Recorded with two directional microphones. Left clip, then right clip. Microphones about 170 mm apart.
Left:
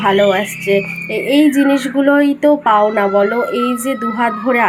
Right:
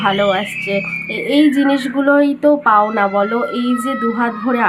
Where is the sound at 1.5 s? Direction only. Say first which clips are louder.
Left 2 dB; 5° left (ahead or behind).